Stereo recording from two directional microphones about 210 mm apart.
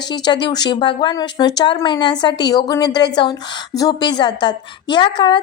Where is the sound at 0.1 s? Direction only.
20° left (ahead or behind).